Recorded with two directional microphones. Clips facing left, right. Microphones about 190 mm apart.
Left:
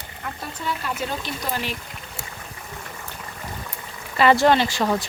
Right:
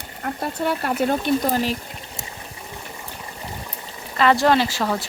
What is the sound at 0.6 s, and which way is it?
Speech, 60° right (ahead or behind).